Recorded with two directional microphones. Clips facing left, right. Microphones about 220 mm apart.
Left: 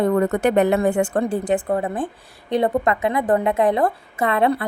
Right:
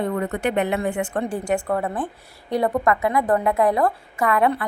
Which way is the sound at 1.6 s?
30° left (ahead or behind).